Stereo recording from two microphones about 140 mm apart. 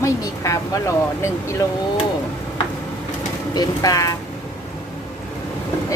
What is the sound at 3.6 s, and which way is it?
Speech, 25° left (ahead or behind).